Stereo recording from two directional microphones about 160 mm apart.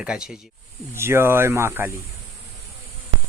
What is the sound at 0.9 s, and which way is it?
Speech, 15° right (ahead or behind).